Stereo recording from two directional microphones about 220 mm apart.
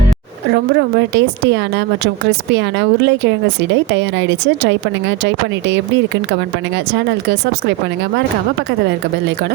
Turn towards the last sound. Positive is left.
turn(degrees=-50)  # may be behind; listen again after turning